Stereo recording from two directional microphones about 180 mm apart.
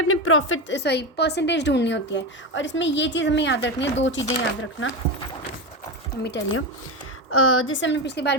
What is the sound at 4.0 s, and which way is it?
Speech, 90° left.